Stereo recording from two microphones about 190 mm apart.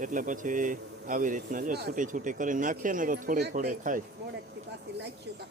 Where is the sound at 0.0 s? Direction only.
45° right (ahead or behind).